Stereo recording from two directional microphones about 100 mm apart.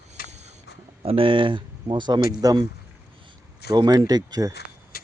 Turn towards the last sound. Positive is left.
turn(degrees=-40)  # may be behind; listen again after turning